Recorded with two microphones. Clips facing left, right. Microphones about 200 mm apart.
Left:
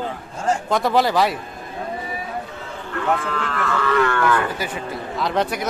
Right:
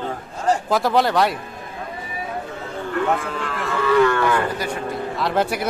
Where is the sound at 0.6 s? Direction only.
Centre (ahead or behind).